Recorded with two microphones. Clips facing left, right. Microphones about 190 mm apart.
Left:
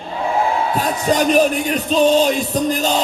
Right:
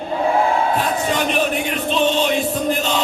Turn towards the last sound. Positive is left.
turn(degrees=40)  # may be behind; listen again after turning